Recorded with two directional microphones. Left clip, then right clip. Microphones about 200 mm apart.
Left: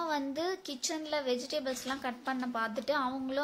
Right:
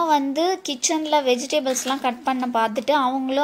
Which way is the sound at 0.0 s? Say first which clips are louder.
Right 14 dB; 15° right (ahead or behind).